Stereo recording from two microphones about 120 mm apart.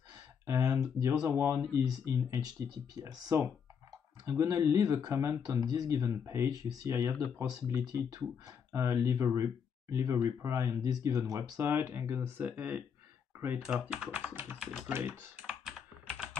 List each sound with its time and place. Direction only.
0.5 s speech: 30° right (ahead or behind)
7.7 s speech: 10° right (ahead or behind)
8.5 s speech: 25° right (ahead or behind); by 14.9 s 5° right (ahead or behind)
14.9 s speech: 20° right (ahead or behind)